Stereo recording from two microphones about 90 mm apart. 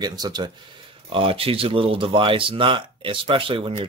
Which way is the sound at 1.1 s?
85° right.